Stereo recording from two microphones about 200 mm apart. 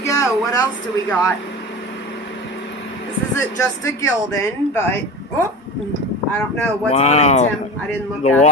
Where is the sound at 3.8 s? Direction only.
15° left (ahead or behind).